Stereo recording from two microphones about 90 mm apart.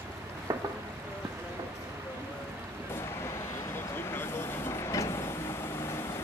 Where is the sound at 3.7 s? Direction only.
25° left (ahead or behind).